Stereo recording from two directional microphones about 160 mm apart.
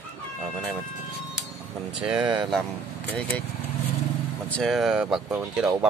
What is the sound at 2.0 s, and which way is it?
Speech, 5° right (ahead or behind).